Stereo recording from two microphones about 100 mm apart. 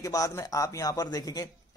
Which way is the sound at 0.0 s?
35° left (ahead or behind).